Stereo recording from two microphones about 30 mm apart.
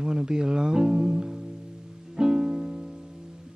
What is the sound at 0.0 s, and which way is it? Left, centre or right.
Speech, right.